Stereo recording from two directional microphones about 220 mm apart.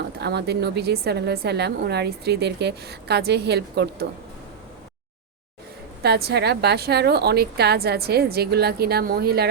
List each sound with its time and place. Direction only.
0.2 s a woman's voice: 50° right (ahead or behind)
6.0 s a woman's voice: 45° right (ahead or behind)